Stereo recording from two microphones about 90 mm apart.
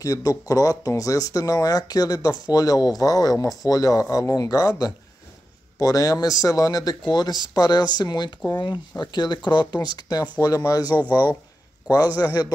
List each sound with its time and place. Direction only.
0.0 s speech: 40° left (ahead or behind)
11.0 s speech: 20° right (ahead or behind)